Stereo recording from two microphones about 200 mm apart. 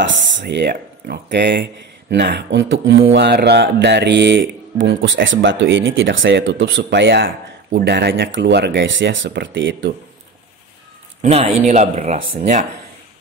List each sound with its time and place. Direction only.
0.0 s speech: 65° right (ahead or behind)
11.1 s speech: 30° right (ahead or behind)